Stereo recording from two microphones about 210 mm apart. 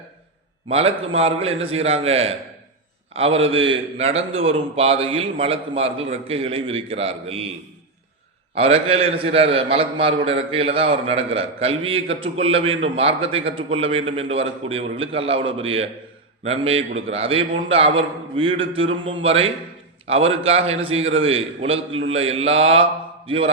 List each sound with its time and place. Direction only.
0.7 s a man's voice: 30° right (ahead or behind)
8.5 s a man's voice: 30° right (ahead or behind)